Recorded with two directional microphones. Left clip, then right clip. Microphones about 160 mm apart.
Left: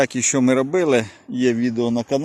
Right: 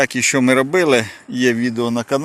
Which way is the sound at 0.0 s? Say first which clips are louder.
Right 3 dB; 15° left (ahead or behind).